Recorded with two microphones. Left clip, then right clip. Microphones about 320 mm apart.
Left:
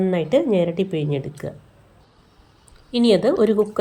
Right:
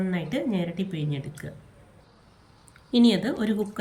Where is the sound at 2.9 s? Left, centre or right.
Centre.